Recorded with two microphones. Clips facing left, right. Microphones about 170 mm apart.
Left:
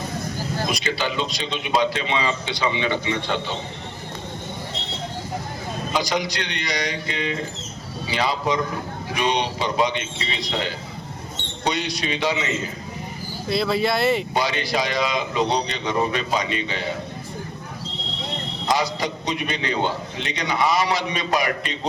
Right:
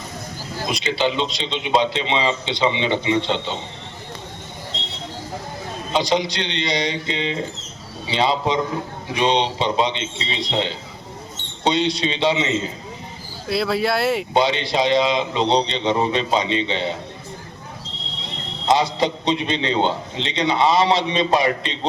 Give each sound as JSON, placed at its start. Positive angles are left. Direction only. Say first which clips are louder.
{"t": 0.7, "sound": "a man's voice", "louder": "right 8 dB", "side_deg": -25}
{"t": 5.9, "sound": "a man's voice", "louder": "right 4 dB", "side_deg": -25}
{"t": 13.5, "sound": "speech", "louder": "right 1 dB", "side_deg": -5}
{"t": 14.3, "sound": "a man's voice", "louder": "right 4 dB", "side_deg": -25}
{"t": 18.7, "sound": "a man's voice", "louder": "right 5 dB", "side_deg": -25}